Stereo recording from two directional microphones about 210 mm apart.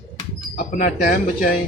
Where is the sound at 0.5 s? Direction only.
40° left (ahead or behind).